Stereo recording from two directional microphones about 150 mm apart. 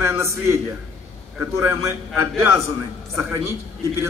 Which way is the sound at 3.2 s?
20° right (ahead or behind).